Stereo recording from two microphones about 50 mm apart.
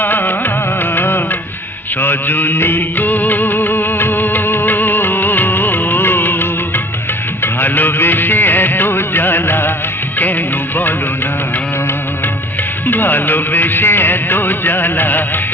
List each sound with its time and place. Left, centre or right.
0.0 s music: left
12.9 s music: left